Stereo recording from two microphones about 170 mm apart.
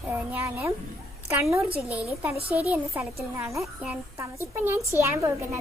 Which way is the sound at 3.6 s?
5° right (ahead or behind).